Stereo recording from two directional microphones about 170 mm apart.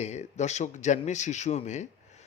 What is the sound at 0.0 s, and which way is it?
A man's voice, 40° left (ahead or behind).